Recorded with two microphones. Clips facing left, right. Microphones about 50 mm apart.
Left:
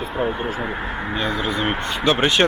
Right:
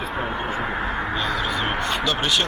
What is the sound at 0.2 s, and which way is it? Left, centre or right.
Speech, centre.